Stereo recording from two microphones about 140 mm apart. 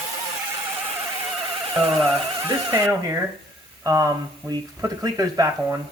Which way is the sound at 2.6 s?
20° right (ahead or behind).